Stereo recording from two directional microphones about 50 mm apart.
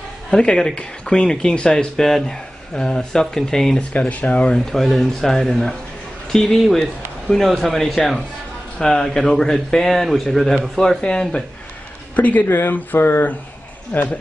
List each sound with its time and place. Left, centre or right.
0.3 s speech: centre
2.0 s speech: centre
3.7 s speech: left
4.6 s a man's voice: centre
8.7 s a man's voice: centre
12.2 s speech: left
12.4 s speech: left